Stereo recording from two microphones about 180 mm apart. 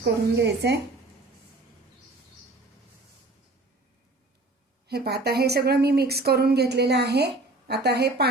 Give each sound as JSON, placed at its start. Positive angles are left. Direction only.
{"t": 0.0, "sound": "a woman's voice", "side_deg": -70}
{"t": 4.9, "sound": "a woman's voice", "side_deg": -65}